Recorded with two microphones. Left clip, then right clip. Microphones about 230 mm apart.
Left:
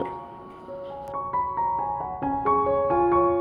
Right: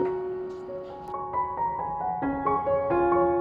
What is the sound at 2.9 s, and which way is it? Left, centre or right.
Music, centre.